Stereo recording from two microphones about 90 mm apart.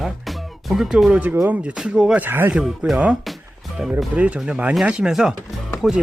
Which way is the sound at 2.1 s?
25° right (ahead or behind).